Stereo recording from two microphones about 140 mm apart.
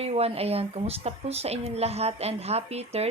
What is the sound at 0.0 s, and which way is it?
Speech, 45° right (ahead or behind).